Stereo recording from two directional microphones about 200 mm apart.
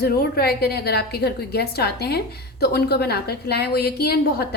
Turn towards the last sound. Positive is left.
turn(degrees=55)  # may be behind; listen again after turning